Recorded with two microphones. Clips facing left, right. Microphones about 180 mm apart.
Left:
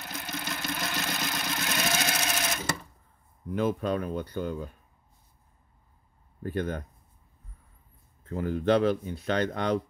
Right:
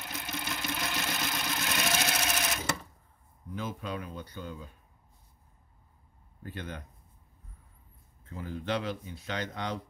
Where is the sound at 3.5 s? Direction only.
60° left (ahead or behind).